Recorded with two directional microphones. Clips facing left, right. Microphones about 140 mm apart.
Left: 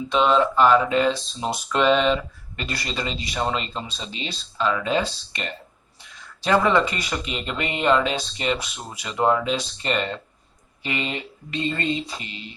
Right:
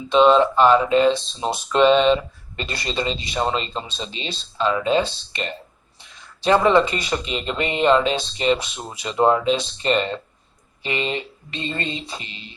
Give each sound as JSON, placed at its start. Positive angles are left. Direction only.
{"t": 0.1, "sound": "speech", "side_deg": -25}